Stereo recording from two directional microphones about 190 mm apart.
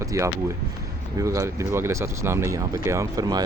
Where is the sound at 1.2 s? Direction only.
15° right (ahead or behind).